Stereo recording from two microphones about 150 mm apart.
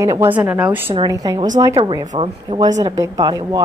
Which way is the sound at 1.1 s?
25° right (ahead or behind).